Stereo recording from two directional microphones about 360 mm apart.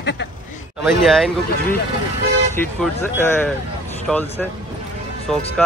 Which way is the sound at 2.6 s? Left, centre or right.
Centre.